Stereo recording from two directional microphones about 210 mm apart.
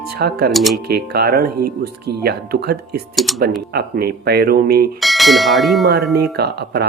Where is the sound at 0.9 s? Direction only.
50° right (ahead or behind).